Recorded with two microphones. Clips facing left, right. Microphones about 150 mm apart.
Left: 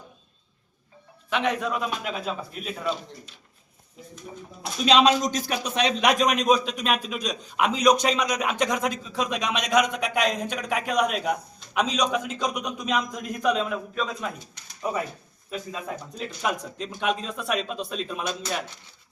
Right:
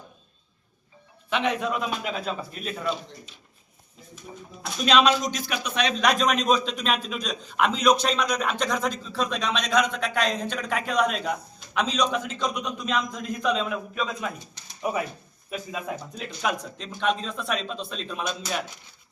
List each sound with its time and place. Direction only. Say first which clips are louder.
1.3 s a man's voice: even; centre (ahead or behind)
4.9 s speech: left 1 dB; 30° left (ahead or behind)
5.2 s speech: left 2 dB; 45° left (ahead or behind)
6.1 s a man's voice: left 1 dB; 15° left (ahead or behind)
14.8 s a man's voice: right 1 dB; 10° right (ahead or behind); by 18.5 s 5° left (ahead or behind)